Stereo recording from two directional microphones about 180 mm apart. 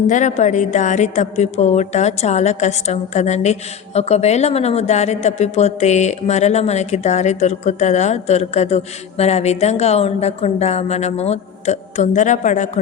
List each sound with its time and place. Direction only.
0.1 s a woman's voice: 40° left (ahead or behind)